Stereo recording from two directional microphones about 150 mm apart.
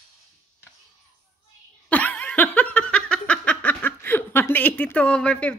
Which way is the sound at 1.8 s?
10° left (ahead or behind).